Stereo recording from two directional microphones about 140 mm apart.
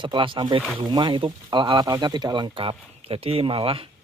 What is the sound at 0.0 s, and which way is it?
Speech, 35° right (ahead or behind).